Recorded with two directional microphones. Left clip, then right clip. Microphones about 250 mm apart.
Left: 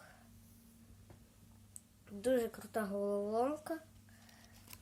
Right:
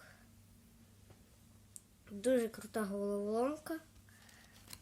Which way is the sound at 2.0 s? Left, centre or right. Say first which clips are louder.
Right 1 dB; right.